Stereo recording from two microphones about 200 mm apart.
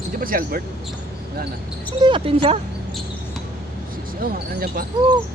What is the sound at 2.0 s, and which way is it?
Speech, 25° right (ahead or behind).